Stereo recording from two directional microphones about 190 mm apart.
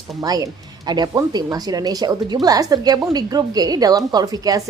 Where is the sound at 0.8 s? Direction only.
20° right (ahead or behind).